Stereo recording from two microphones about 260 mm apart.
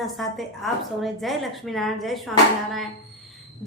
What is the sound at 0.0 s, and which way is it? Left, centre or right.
A woman's voice, centre.